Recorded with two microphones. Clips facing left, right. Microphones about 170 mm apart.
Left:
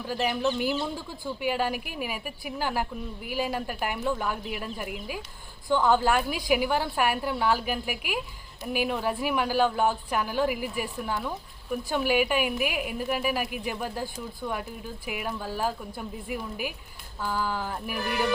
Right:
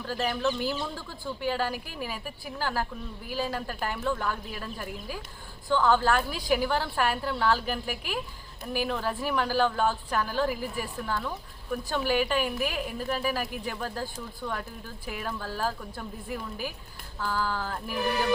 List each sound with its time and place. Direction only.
0.0 s a woman's voice: 15° left (ahead or behind)